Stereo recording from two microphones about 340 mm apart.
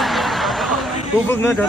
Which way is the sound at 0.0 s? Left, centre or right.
Centre.